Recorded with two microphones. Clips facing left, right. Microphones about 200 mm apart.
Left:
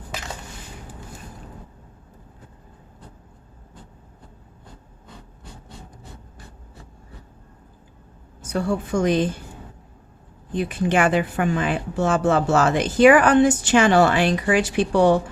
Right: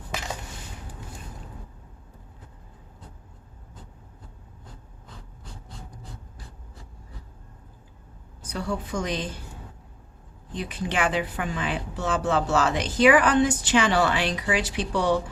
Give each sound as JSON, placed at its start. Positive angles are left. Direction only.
{"t": 8.4, "sound": "speech", "side_deg": 50}
{"t": 10.5, "sound": "speech", "side_deg": 50}